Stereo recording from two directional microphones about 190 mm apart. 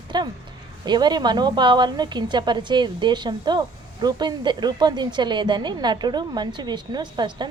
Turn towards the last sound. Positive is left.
turn(degrees=-25)  # may be behind; listen again after turning